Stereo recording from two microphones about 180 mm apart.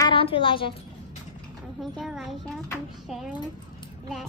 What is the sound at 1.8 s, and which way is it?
Speech, centre (ahead or behind).